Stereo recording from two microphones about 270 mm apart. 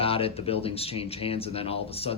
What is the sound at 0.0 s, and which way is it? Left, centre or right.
Speech, left.